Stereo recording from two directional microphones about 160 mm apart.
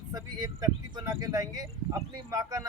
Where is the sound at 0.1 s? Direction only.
25° right (ahead or behind).